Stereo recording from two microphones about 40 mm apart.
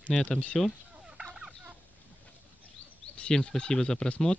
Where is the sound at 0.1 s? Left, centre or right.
Centre.